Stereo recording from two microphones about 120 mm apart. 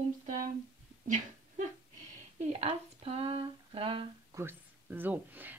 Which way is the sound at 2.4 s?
60° right (ahead or behind).